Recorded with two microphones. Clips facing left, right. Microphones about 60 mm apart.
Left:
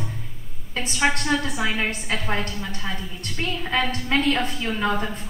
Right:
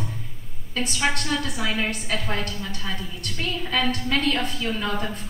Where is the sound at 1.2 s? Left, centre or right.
Centre.